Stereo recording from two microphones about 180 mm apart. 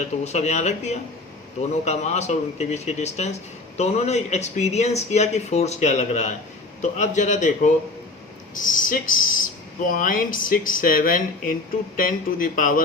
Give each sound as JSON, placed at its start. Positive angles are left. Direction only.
{"t": 0.0, "sound": "speech", "side_deg": 40}